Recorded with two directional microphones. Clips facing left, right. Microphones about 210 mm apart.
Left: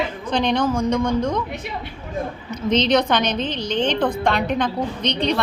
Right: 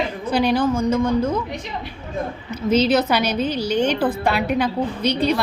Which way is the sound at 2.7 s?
5° right (ahead or behind).